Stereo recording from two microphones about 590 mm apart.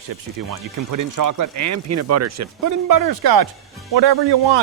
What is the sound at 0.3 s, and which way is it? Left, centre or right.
Speech, right.